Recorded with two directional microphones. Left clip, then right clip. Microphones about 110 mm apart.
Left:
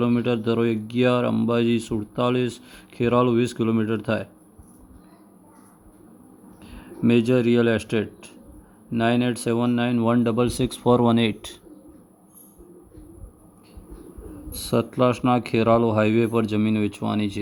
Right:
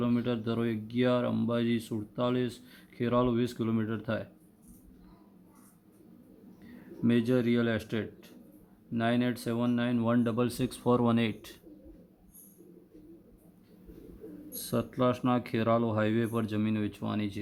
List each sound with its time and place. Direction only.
0.0 s speech: 40° left (ahead or behind)
7.0 s speech: 40° left (ahead or behind)
14.5 s speech: 40° left (ahead or behind)